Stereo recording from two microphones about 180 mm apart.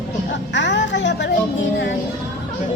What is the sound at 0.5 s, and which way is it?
Speech, 80° left.